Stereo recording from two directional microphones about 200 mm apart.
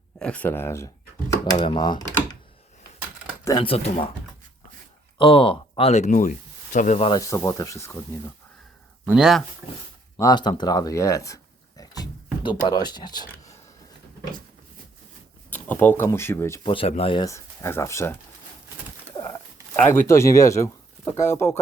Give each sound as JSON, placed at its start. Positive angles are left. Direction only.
{"t": 0.2, "sound": "speech", "side_deg": 5}
{"t": 1.5, "sound": "speech", "side_deg": 25}
{"t": 3.4, "sound": "speech", "side_deg": 20}
{"t": 5.1, "sound": "speech", "side_deg": 25}
{"t": 7.1, "sound": "speech", "side_deg": 15}
{"t": 9.0, "sound": "speech", "side_deg": -5}
{"t": 10.2, "sound": "speech", "side_deg": 20}
{"t": 15.4, "sound": "speech", "side_deg": 10}
{"t": 16.6, "sound": "speech", "side_deg": 25}
{"t": 19.1, "sound": "a sound", "side_deg": 20}
{"t": 19.7, "sound": "speech", "side_deg": 10}